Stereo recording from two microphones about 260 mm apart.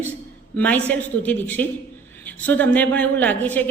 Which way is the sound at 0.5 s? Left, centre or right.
Centre.